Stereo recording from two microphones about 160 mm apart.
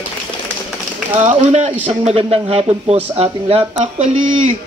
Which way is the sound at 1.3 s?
45° right (ahead or behind).